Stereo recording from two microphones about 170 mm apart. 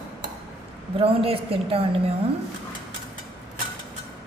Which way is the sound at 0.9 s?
35° right (ahead or behind).